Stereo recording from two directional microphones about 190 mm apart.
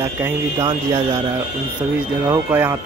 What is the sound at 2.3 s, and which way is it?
Speech, 15° right (ahead or behind).